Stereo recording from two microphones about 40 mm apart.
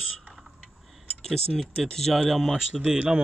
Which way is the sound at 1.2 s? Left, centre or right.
Centre.